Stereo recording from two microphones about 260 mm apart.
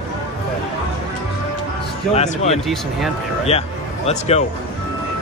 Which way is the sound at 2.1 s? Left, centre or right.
Left.